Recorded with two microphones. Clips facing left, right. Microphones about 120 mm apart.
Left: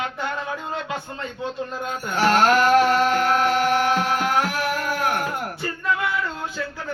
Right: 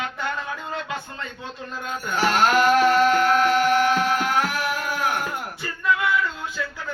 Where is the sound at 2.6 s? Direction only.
30° left (ahead or behind).